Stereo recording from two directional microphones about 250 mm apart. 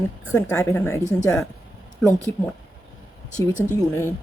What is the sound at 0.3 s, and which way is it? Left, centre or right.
Speech, centre.